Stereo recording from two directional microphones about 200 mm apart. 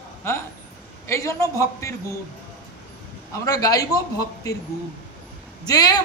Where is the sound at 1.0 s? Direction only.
15° left (ahead or behind).